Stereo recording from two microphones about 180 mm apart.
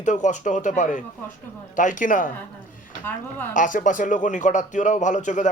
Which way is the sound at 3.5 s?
45° left (ahead or behind).